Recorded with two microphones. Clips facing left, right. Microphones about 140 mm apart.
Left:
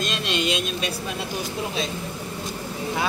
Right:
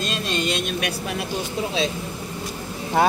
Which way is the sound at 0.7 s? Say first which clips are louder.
Right 2 dB; 65° right (ahead or behind).